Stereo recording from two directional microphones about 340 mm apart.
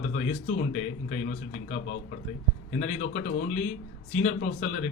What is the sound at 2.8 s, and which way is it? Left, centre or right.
A man's voice, left.